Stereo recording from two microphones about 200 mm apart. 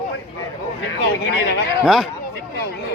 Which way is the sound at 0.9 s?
55° left (ahead or behind).